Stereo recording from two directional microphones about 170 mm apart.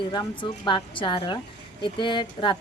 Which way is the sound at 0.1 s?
25° left (ahead or behind).